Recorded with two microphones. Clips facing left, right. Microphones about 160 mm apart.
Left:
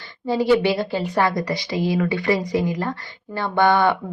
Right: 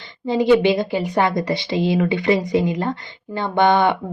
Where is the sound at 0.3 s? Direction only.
20° right (ahead or behind).